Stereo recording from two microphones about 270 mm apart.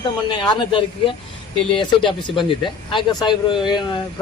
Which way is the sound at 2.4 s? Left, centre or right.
Centre.